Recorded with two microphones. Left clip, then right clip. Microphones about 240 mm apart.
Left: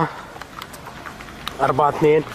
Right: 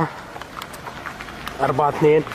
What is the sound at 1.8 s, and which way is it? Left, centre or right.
Speech, centre.